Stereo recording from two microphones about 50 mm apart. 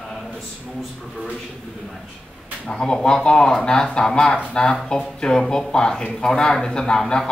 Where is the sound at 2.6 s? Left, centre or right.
Centre.